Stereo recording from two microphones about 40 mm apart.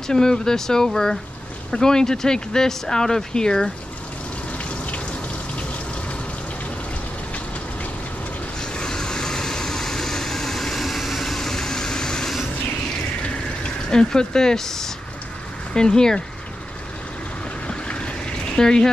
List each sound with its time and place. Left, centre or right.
0.1 s speech: centre
4.6 s raindrop: left
8.5 s vehicle: centre
13.8 s speech: centre
17.6 s a sound: left
18.6 s speech: centre